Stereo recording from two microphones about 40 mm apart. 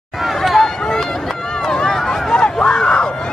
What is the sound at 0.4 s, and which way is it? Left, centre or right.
Run, centre.